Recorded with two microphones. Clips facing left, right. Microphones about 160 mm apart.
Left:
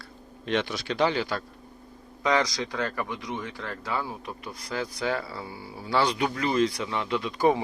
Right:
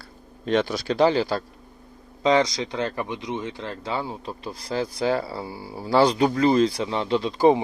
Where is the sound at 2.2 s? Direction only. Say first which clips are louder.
Right 5 dB; 25° right (ahead or behind).